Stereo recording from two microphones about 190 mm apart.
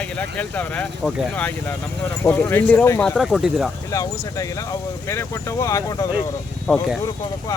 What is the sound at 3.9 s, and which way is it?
Speech, 15° left (ahead or behind).